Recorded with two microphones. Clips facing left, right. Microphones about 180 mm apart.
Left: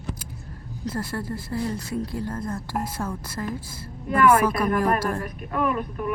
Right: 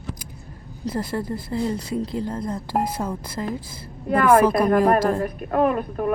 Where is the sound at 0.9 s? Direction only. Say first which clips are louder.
Right 3 dB; 15° right (ahead or behind).